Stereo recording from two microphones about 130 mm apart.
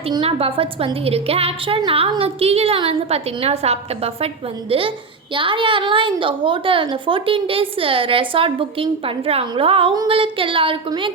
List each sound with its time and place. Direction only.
0.1 s a woman's voice: 45° right (ahead or behind)